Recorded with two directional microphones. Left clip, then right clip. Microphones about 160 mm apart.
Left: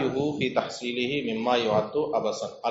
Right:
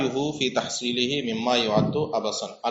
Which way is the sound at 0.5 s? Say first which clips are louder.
Right 2 dB; 50° right (ahead or behind).